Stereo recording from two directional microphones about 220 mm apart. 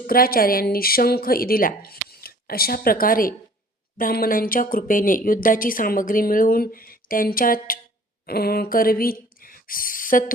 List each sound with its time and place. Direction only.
0.1 s speech: 40° left (ahead or behind)